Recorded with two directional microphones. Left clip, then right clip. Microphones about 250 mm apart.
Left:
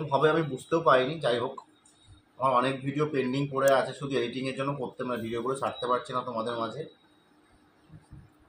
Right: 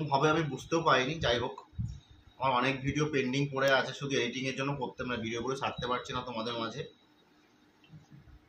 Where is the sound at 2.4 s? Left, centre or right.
Centre.